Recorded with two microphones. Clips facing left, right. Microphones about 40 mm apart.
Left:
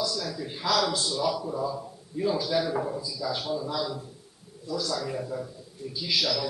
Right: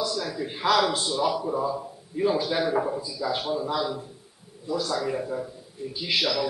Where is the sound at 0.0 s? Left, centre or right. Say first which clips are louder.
Right 2 dB; right.